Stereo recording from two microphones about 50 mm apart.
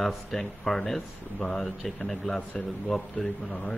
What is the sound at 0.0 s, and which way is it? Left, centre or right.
A man's voice, centre.